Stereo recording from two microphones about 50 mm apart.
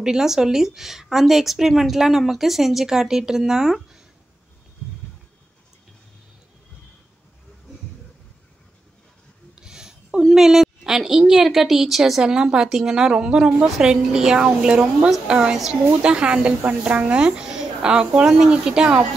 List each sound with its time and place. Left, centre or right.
0.0 s a woman's voice: centre
9.6 s a woman's voice: centre